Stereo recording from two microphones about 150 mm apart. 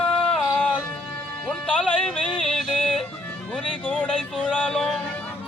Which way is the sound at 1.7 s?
5° left (ahead or behind).